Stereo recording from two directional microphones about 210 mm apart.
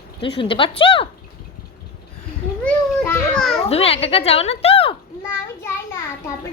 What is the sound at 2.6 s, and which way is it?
Speech, 5° left (ahead or behind).